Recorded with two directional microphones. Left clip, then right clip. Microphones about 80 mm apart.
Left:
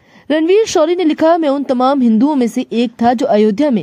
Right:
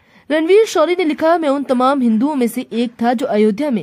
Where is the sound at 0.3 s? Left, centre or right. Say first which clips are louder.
Left 1 dB; left.